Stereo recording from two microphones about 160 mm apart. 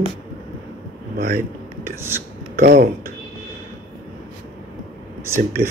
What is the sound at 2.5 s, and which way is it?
Speech, 75° right (ahead or behind).